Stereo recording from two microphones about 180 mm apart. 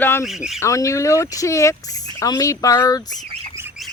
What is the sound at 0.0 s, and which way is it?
Speech, 15° left (ahead or behind).